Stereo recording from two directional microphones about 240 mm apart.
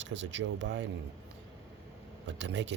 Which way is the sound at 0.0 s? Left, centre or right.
Right.